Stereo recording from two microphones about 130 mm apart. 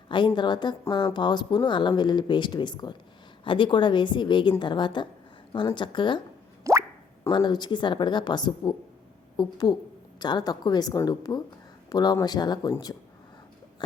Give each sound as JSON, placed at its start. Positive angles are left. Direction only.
{"t": 0.3, "sound": "speech", "side_deg": 35}
{"t": 6.7, "sound": "plop", "side_deg": -25}
{"t": 7.3, "sound": "speech", "side_deg": 35}